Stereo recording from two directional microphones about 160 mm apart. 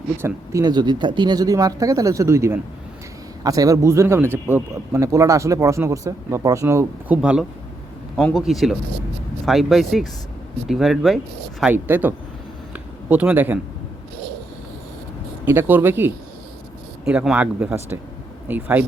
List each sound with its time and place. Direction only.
0.2 s speech: 15° right (ahead or behind)
0.6 s speech: 25° right (ahead or behind)
7.2 s speech: 5° right (ahead or behind)
12.7 s a sound: 10° right (ahead or behind)
15.4 s speech: 15° right (ahead or behind)